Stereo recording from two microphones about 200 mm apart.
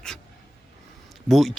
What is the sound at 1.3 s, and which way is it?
Speech, centre (ahead or behind).